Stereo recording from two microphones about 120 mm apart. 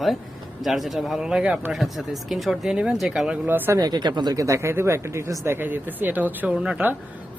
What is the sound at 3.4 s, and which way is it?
Speech, 15° right (ahead or behind).